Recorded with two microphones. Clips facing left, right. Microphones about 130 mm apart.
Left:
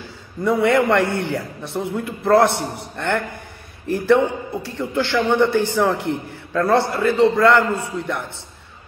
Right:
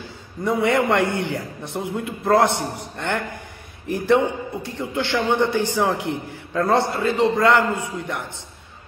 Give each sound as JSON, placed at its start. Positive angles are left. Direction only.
{"t": 0.4, "sound": "a man's voice", "side_deg": -20}